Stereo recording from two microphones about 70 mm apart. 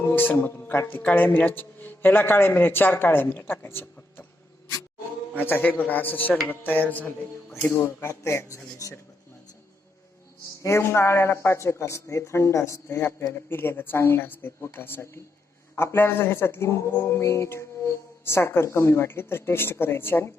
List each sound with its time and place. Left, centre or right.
0.0 s a man's voice: left
5.3 s a man's voice: left
7.5 s mantra: left
10.6 s speech: left
13.0 s mantra: left